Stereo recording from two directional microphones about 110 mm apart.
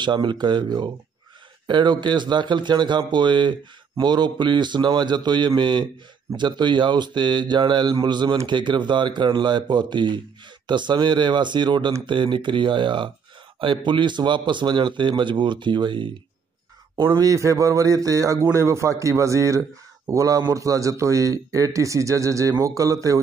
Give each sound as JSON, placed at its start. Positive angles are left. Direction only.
{"t": 0.0, "sound": "a man's voice", "side_deg": -45}
{"t": 17.0, "sound": "a man's voice", "side_deg": -30}